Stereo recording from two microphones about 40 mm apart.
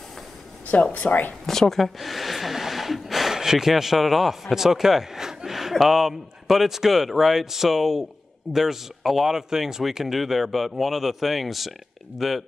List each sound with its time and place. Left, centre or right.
0.9 s speech: left
1.4 s speech: centre